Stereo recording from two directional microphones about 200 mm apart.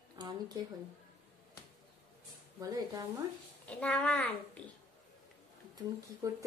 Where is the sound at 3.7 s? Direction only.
5° left (ahead or behind).